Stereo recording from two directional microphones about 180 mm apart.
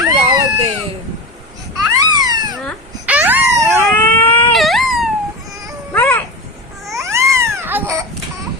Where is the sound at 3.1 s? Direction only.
10° right (ahead or behind).